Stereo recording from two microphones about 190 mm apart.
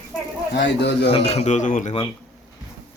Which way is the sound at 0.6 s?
65° left (ahead or behind).